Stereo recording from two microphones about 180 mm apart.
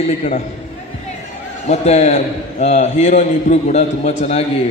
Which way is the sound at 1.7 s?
35° left (ahead or behind).